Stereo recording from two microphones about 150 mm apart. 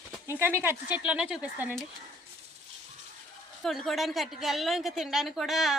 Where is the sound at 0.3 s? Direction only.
15° right (ahead or behind).